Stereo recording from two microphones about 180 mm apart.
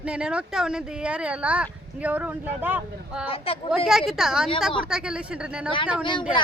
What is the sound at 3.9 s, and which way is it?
Speech, centre (ahead or behind).